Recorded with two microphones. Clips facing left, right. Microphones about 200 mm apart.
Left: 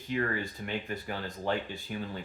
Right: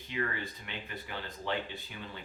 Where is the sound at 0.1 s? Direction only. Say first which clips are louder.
Left 5 dB; 45° left (ahead or behind).